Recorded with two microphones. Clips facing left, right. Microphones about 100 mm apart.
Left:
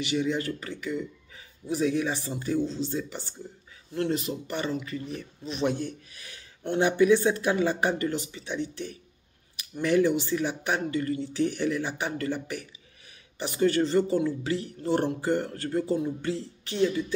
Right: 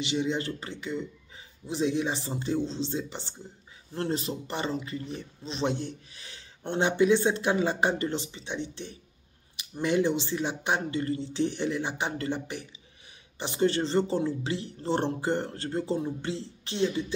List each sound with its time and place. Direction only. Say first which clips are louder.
0.0 s speech: left 1 dB; 25° right (ahead or behind)